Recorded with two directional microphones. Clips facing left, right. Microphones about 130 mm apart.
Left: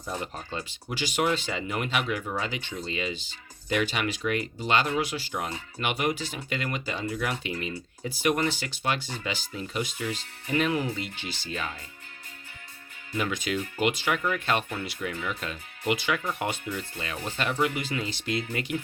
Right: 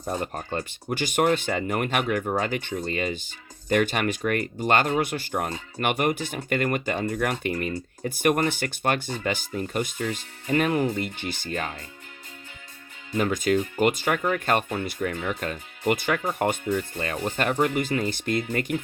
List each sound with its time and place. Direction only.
0.0 s speech: 50° right (ahead or behind)
13.1 s speech: 40° right (ahead or behind)